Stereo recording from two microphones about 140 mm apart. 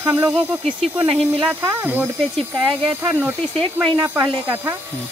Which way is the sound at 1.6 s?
20° right (ahead or behind).